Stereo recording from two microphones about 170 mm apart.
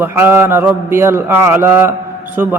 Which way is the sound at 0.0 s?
15° right (ahead or behind).